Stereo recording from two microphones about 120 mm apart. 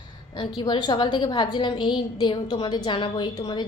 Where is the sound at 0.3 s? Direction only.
40° left (ahead or behind).